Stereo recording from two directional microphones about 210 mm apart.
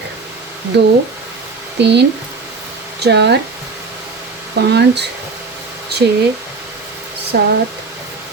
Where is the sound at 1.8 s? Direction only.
55° right (ahead or behind).